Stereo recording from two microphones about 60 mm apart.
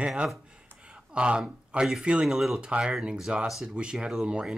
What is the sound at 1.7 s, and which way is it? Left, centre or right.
Speech, centre.